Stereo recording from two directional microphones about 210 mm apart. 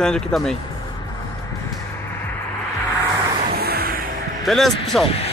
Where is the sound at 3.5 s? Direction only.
50° right (ahead or behind).